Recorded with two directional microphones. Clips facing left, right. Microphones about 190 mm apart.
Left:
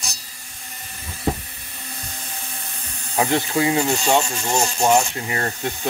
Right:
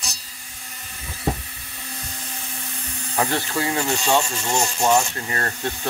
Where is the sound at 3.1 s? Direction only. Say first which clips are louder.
Left 3 dB; 15° left (ahead or behind).